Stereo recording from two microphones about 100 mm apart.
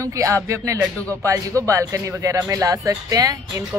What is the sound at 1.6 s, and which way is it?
Speech, 30° right (ahead or behind).